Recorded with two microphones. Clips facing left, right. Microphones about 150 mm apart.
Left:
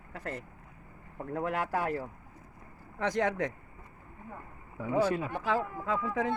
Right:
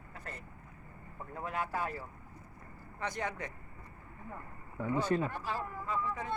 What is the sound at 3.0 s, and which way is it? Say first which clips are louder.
Speech: left 8 dB; 90° left.